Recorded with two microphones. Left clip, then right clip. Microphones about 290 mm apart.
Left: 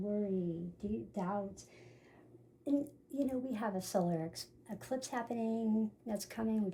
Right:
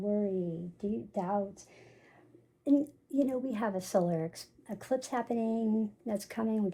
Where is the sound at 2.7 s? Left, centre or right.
Right.